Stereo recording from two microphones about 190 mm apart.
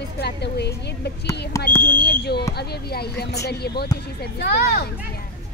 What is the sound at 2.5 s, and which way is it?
Speech, 55° left (ahead or behind).